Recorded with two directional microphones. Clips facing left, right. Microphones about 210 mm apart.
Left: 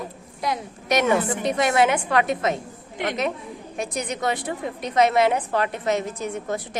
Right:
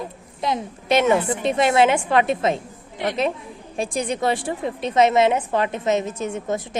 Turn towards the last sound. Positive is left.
turn(degrees=-25)  # may be behind; listen again after turning